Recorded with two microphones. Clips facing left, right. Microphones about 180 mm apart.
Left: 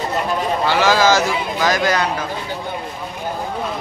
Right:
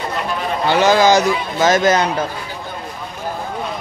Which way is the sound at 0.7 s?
20° right (ahead or behind).